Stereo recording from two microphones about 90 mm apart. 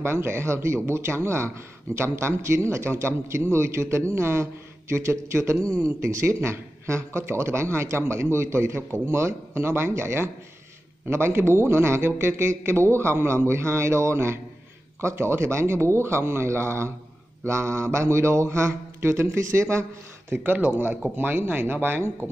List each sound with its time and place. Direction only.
0.0 s a man's voice: 30° right (ahead or behind)